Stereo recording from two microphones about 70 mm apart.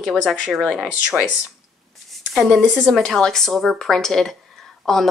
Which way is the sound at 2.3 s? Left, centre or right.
Centre.